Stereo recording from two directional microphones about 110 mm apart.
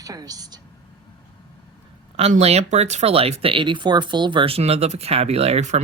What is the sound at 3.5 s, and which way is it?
Speech, 45° right (ahead or behind).